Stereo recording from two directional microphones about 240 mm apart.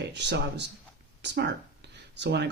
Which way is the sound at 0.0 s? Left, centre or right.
Right.